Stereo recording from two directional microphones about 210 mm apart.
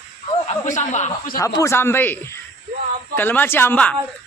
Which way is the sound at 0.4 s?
35° left (ahead or behind).